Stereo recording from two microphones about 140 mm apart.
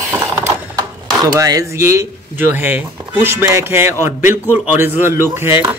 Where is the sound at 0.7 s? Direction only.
25° right (ahead or behind).